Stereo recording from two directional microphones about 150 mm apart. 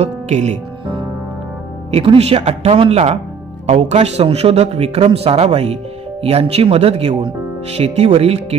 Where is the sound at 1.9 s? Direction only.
40° right (ahead or behind).